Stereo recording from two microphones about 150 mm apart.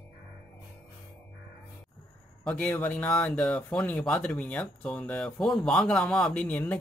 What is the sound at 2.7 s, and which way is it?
Speech, 10° left (ahead or behind).